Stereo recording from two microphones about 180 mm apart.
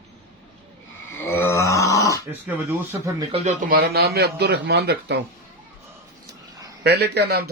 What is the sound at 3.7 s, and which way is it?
A man's voice, 60° right (ahead or behind).